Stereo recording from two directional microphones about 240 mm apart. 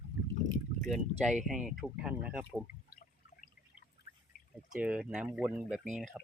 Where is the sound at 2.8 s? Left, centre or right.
Left.